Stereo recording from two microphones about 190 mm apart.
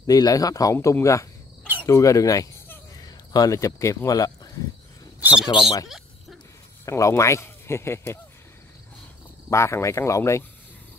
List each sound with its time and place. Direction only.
0.0 s cricket: 20° left (ahead or behind)
1.8 s speech: 15° left (ahead or behind)
5.5 s speech: 25° left (ahead or behind)
6.9 s speech: 15° left (ahead or behind)
9.5 s speech: 15° left (ahead or behind)